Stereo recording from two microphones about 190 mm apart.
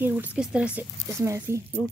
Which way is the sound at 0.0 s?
10° right (ahead or behind).